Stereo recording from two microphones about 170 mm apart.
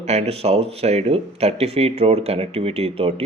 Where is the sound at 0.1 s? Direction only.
40° right (ahead or behind).